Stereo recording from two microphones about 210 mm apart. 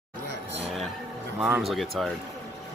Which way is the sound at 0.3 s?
55° right (ahead or behind).